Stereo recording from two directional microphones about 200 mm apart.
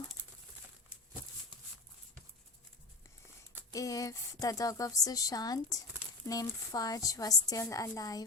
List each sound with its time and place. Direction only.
3.7 s speech: 15° left (ahead or behind)